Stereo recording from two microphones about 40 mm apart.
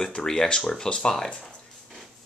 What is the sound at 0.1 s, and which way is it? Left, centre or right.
Speech, centre.